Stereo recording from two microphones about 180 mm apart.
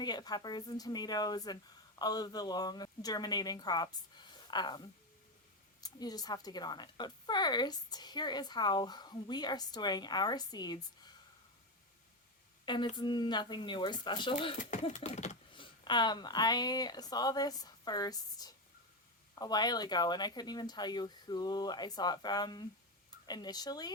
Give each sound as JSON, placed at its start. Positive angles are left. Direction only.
{"t": 0.0, "sound": "speech", "side_deg": 25}
{"t": 12.6, "sound": "a woman's voice", "side_deg": 25}
{"t": 14.6, "sound": "a sound", "side_deg": 40}
{"t": 15.6, "sound": "speech", "side_deg": 25}